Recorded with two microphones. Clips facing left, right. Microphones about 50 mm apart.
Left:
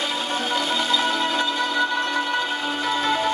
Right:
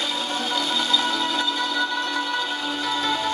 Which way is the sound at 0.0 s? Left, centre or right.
Centre.